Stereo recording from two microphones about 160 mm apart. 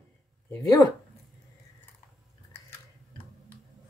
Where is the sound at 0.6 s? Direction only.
20° left (ahead or behind).